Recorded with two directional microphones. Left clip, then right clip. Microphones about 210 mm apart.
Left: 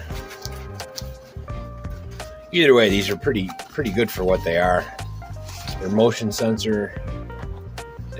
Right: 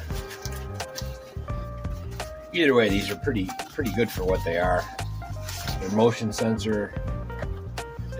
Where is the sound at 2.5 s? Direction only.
50° left (ahead or behind).